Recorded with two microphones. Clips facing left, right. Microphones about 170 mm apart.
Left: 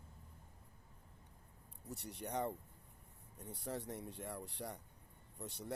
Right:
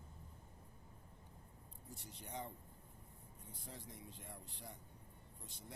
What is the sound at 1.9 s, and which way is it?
Speech, 70° left (ahead or behind).